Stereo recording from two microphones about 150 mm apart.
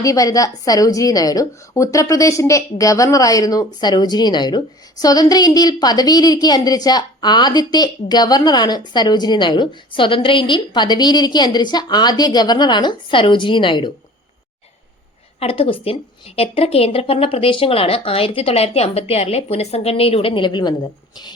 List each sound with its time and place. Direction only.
0.0 s a woman's voice: 25° left (ahead or behind)
15.4 s a woman's voice: 40° left (ahead or behind)